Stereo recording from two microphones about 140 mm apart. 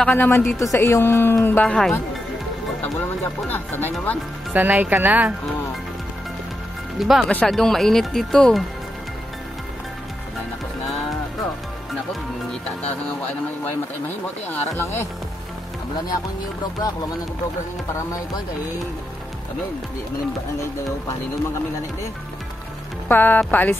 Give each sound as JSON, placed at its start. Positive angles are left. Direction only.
{"t": 0.0, "sound": "speech", "side_deg": 15}
{"t": 3.4, "sound": "speech", "side_deg": 15}
{"t": 4.5, "sound": "speech", "side_deg": -10}
{"t": 7.0, "sound": "speech", "side_deg": 0}
{"t": 12.6, "sound": "speech", "side_deg": 10}
{"t": 23.0, "sound": "speech", "side_deg": 15}